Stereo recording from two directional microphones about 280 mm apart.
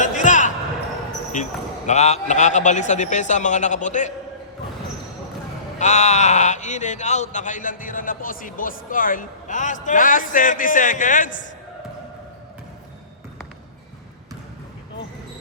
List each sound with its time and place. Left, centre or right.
0.0 s basketball bounce: left
1.4 s speech: left
5.8 s speech: left